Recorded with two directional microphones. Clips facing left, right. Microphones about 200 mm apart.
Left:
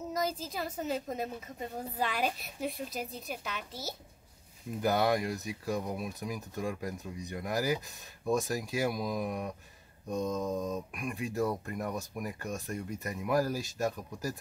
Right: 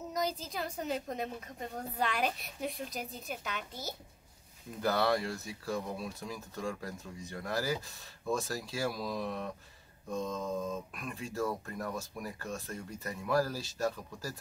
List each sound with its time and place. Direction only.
0.1 s a woman's voice: centre (ahead or behind)
4.8 s speech: 15° left (ahead or behind)